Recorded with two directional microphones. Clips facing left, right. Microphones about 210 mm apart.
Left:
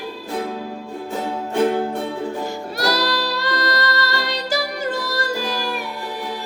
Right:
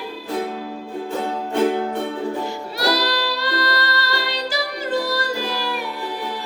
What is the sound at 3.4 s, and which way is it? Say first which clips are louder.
Music: left 1 dB; 45° left (ahead or behind).